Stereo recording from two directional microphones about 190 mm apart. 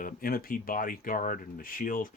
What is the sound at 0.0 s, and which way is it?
Speech, 50° left (ahead or behind).